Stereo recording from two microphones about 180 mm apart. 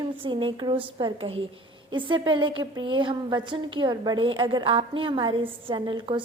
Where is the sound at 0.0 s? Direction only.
25° right (ahead or behind).